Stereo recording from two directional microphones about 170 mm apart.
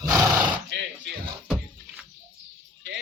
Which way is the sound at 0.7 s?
90° right.